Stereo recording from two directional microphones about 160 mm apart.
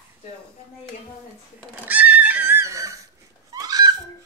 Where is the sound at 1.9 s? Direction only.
10° right (ahead or behind).